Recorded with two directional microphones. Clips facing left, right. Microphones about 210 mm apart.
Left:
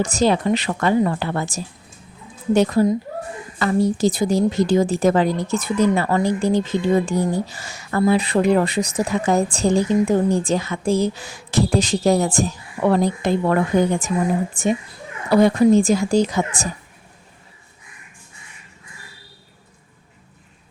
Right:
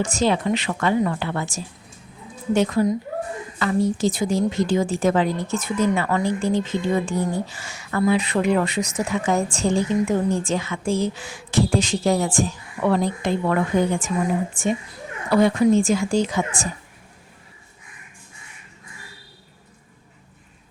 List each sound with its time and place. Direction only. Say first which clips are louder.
0.0 s speech: left 3 dB; 40° left (ahead or behind)